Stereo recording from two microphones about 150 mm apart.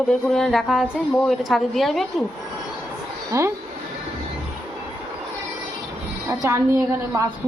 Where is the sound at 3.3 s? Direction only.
20° right (ahead or behind).